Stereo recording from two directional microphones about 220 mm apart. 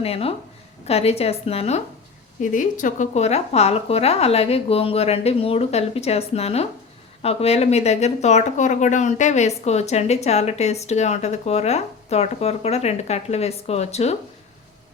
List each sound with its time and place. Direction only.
0.0 s speech: 25° left (ahead or behind)